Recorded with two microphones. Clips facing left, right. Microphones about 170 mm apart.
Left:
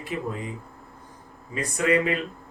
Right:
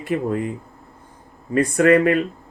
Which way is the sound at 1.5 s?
55° right (ahead or behind).